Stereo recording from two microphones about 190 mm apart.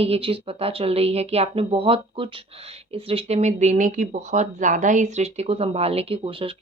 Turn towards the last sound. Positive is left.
turn(degrees=-25)  # may be behind; listen again after turning